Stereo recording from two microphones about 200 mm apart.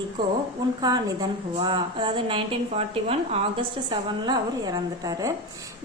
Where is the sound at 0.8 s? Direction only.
20° right (ahead or behind).